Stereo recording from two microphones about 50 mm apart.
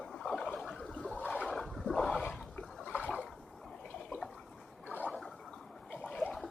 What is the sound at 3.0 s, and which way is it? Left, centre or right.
Boat, left.